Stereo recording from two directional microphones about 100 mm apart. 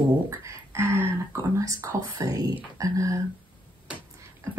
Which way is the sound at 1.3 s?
30° right (ahead or behind).